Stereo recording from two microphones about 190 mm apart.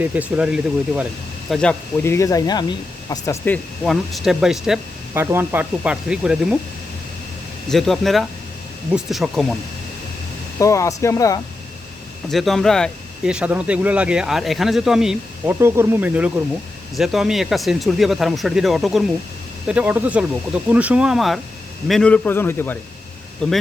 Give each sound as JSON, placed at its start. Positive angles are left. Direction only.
{"t": 0.0, "sound": "speech", "side_deg": -10}
{"t": 2.0, "sound": "speech", "side_deg": 15}
{"t": 3.8, "sound": "speech", "side_deg": 0}
{"t": 7.7, "sound": "speech", "side_deg": 0}
{"t": 10.6, "sound": "speech", "side_deg": 15}
{"t": 12.3, "sound": "speech", "side_deg": 0}